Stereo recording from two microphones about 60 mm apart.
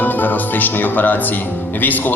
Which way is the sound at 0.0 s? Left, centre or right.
Left.